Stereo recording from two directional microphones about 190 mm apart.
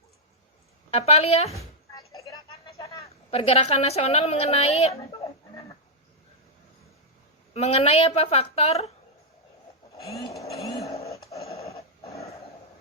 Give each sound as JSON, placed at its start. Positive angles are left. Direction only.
{"t": 0.9, "sound": "a woman's voice", "side_deg": 30}
{"t": 1.5, "sound": "music", "side_deg": 15}
{"t": 3.0, "sound": "a woman's voice", "side_deg": 30}
{"t": 4.9, "sound": "a sound", "side_deg": 20}
{"t": 7.5, "sound": "a woman's voice", "side_deg": 35}
{"t": 10.0, "sound": "vehicle", "side_deg": 15}
{"t": 11.1, "sound": "a sound", "side_deg": 15}
{"t": 11.6, "sound": "dog", "side_deg": 15}